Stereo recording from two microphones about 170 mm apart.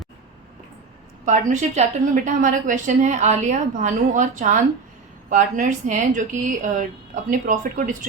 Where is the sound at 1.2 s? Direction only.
45° right (ahead or behind).